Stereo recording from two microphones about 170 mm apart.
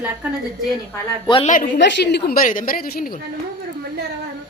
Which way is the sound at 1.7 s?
85° left.